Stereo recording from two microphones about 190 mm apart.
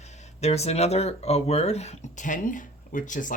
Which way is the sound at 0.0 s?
35° left (ahead or behind).